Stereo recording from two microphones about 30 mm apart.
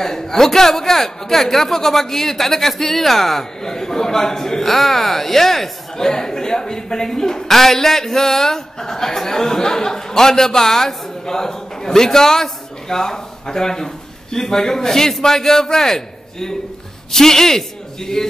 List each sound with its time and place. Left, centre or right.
0.0 s a woman's voice: centre